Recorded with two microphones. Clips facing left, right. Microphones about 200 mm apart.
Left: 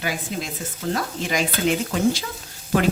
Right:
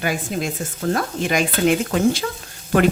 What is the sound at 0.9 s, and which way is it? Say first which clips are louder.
Speech: right 4 dB; 55° right (ahead or behind).